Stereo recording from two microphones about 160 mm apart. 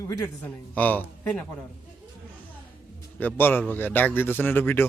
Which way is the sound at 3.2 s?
15° left (ahead or behind).